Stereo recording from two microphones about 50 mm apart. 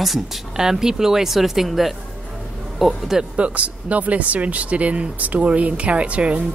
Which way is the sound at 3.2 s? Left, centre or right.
Right.